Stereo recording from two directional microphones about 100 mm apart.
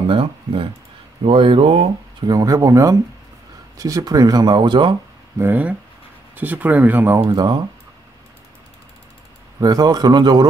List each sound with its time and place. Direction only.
0.1 s speech: 65° right (ahead or behind)
2.2 s speech: 35° right (ahead or behind)
5.4 s speech: 15° right (ahead or behind)
7.2 s speech: 40° right (ahead or behind)
9.6 s speech: 40° right (ahead or behind)